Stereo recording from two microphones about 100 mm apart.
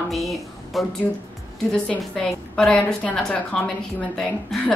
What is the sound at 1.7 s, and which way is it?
A woman's voice, 5° left (ahead or behind).